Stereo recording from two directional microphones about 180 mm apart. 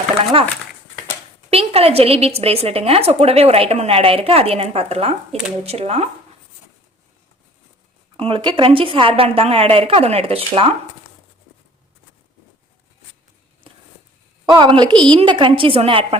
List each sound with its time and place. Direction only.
0.3 s a woman's voice: 30° right (ahead or behind)
8.1 s a woman's voice: 30° right (ahead or behind)
13.7 s a sound: 30° right (ahead or behind)
14.4 s a woman's voice: 25° right (ahead or behind)